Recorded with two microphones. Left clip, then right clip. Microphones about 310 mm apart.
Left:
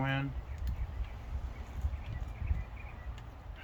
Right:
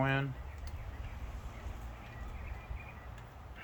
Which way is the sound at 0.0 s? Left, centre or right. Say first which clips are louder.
Right 2 dB; centre.